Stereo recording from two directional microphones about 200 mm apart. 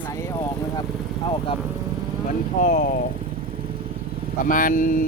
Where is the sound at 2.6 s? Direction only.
40° left (ahead or behind).